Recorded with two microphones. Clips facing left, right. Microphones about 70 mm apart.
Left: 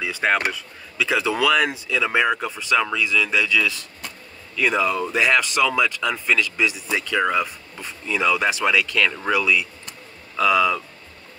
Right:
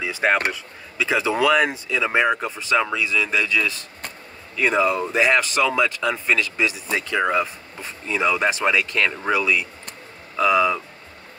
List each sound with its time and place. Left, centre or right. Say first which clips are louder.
0.0 s speech: right 1 dB; right